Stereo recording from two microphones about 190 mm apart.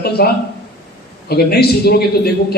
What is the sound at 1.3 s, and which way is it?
A man's voice, 55° left (ahead or behind).